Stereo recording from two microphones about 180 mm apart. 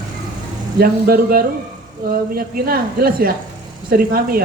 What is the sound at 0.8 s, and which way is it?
Speech, 55° right (ahead or behind).